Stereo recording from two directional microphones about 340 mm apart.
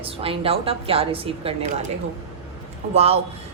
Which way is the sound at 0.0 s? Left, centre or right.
Centre.